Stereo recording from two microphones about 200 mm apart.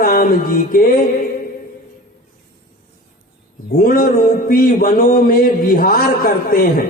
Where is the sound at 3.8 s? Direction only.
45° left (ahead or behind).